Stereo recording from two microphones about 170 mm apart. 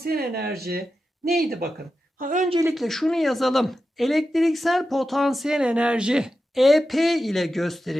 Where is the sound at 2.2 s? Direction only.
50° right (ahead or behind).